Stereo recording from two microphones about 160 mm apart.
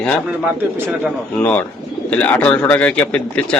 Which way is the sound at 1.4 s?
10° left (ahead or behind).